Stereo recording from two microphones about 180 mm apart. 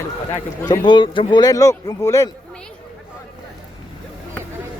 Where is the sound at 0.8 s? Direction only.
25° left (ahead or behind).